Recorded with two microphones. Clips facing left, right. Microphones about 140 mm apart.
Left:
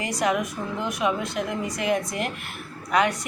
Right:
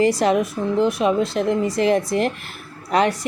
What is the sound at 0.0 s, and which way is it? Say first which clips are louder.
A woman's voice: right 8 dB; 30° right (ahead or behind).